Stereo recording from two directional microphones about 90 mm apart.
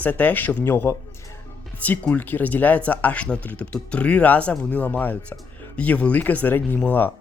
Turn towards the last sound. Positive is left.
turn(degrees=20)  # may be behind; listen again after turning